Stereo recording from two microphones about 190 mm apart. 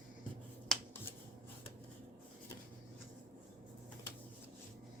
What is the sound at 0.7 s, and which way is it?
Finger snapping, 5° left (ahead or behind).